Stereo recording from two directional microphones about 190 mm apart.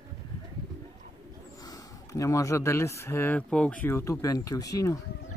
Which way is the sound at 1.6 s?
15° left (ahead or behind).